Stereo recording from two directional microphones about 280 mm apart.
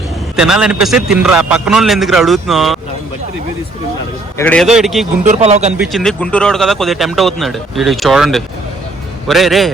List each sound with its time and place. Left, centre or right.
0.3 s speech: centre
4.4 s speech: centre
5.2 s speech: right
5.7 s speech: centre